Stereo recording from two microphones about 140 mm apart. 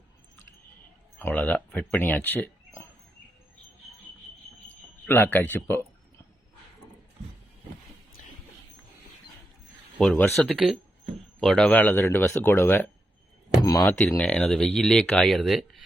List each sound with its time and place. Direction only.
1.2 s speech: 10° left (ahead or behind)
5.0 s speech: 15° left (ahead or behind)
10.0 s speech: centre (ahead or behind)
13.6 s speech: 30° left (ahead or behind)
13.8 s speech: 10° left (ahead or behind)